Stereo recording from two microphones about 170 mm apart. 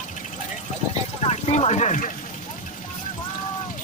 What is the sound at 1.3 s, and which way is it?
Speech, 40° left (ahead or behind).